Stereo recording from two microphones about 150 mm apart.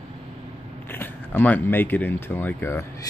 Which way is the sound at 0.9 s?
15° left (ahead or behind).